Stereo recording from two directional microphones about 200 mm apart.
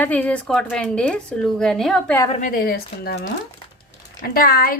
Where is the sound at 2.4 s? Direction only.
45° left (ahead or behind).